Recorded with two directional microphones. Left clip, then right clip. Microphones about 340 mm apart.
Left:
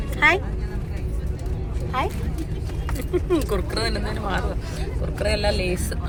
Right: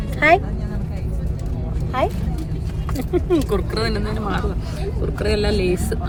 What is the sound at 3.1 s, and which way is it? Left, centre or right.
Speech, centre.